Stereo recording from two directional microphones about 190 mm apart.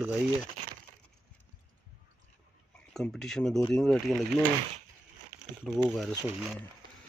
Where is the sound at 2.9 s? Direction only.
Centre (ahead or behind).